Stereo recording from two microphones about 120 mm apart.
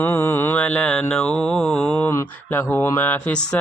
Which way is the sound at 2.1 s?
15° left (ahead or behind).